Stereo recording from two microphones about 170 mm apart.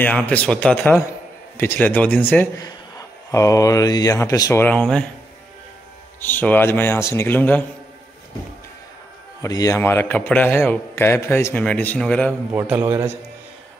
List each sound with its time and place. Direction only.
0.0 s a man's voice: 10° left (ahead or behind)
6.2 s a man's voice: 10° left (ahead or behind)
9.4 s a man's voice: 20° left (ahead or behind)
12.5 s a man's voice: 10° right (ahead or behind)